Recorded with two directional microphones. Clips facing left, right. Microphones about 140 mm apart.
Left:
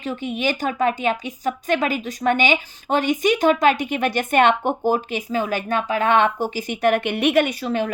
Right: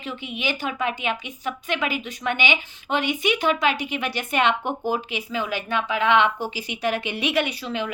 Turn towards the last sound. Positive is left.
turn(degrees=45)  # may be behind; listen again after turning